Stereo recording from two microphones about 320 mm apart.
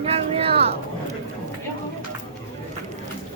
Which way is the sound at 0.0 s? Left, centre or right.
Centre.